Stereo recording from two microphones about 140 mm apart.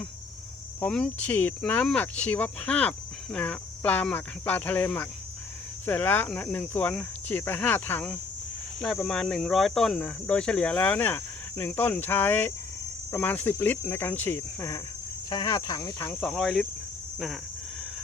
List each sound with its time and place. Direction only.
0.8 s speech: 10° left (ahead or behind); by 16.0 s 25° left (ahead or behind)
16.2 s speech: centre (ahead or behind)